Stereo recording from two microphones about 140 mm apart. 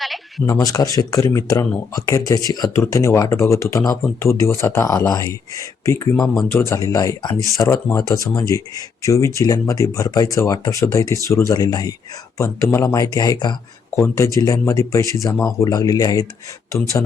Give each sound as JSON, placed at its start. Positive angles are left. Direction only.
{"t": 0.0, "sound": "bleat", "side_deg": 0}
{"t": 0.6, "sound": "speech", "side_deg": 25}